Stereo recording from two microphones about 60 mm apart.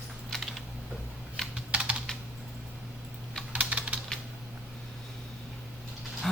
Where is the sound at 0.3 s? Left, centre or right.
Centre.